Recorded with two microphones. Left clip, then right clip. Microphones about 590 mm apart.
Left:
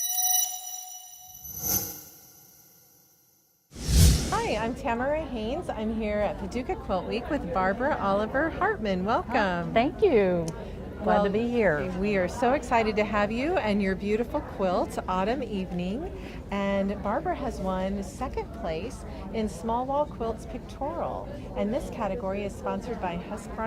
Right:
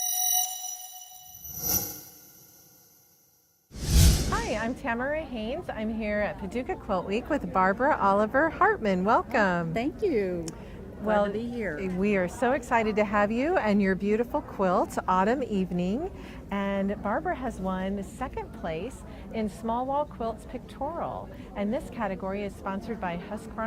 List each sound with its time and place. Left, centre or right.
1.6 s a sound: centre
4.3 s a woman's voice: right
9.7 s a woman's voice: centre
11.3 s a woman's voice: centre
12.0 s a woman's voice: right